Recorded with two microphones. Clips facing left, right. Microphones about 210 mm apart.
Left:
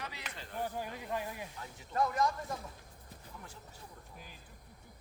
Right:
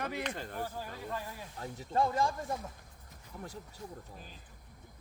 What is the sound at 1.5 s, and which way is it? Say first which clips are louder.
Speech: right 3 dB; 40° right (ahead or behind).